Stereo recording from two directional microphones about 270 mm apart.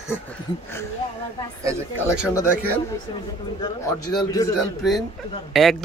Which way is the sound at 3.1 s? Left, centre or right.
Centre.